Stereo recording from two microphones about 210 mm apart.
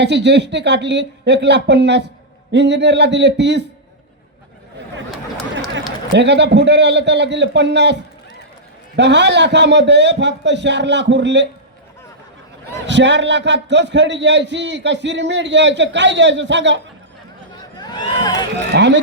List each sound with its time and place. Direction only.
0.0 s a man's voice: 55° right (ahead or behind)
6.1 s a man's voice: 55° right (ahead or behind)
9.0 s a man's voice: 55° right (ahead or behind)
12.9 s a man's voice: 55° right (ahead or behind)
17.5 s a sound: 20° left (ahead or behind)
18.7 s a man's voice: 55° right (ahead or behind)